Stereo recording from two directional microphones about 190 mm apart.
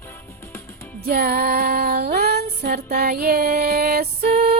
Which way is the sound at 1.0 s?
55° right (ahead or behind).